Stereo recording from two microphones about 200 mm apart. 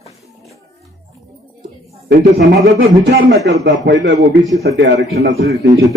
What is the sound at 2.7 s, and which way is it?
A man's voice, 60° right (ahead or behind).